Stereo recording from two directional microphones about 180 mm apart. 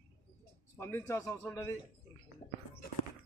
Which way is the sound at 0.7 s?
15° left (ahead or behind).